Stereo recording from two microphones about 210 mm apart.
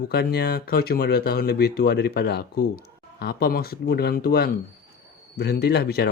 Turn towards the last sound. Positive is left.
turn(degrees=50)  # may be behind; listen again after turning